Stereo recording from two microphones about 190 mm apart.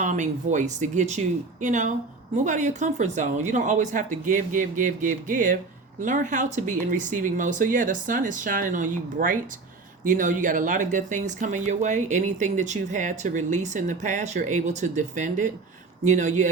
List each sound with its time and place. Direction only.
0.0 s speech: 40° right (ahead or behind)